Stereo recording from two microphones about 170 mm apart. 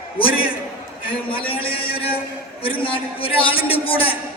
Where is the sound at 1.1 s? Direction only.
30° left (ahead or behind).